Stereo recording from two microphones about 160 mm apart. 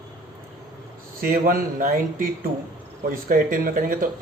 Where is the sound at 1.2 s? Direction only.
60° right (ahead or behind).